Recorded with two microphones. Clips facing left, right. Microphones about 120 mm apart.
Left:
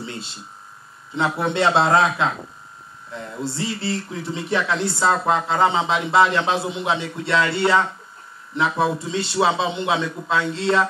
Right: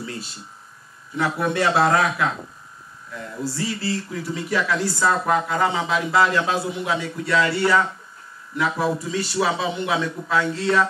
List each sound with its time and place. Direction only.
0.0 s speech: 25° left (ahead or behind)